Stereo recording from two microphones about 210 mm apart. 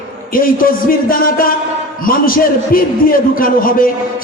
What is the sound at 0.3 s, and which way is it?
Speech, 45° left (ahead or behind).